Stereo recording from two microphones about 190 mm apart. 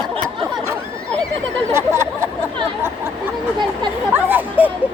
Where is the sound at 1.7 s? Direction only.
15° right (ahead or behind).